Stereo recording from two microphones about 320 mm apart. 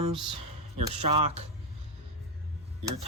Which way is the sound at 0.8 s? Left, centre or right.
Centre.